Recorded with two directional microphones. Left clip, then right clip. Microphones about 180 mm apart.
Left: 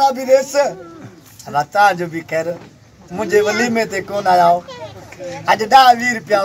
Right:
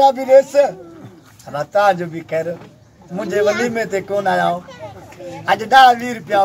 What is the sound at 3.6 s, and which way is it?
A man's voice, 55° left (ahead or behind).